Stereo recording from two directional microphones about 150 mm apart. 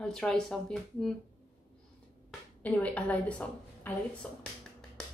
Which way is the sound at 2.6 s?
10° left (ahead or behind).